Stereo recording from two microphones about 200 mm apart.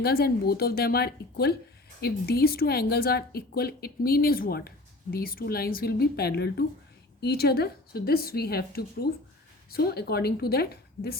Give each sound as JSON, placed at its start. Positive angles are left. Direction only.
{"t": 0.0, "sound": "a woman's voice", "side_deg": 50}